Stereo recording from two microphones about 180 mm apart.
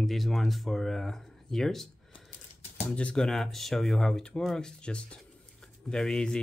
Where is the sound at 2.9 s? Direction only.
5° left (ahead or behind).